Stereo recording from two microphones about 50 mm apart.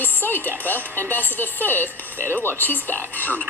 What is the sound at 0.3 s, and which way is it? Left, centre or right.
Speech, left.